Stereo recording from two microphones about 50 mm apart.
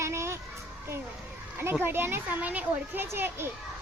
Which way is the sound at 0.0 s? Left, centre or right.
Right.